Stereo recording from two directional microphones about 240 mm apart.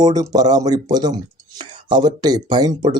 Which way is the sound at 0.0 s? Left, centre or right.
Centre.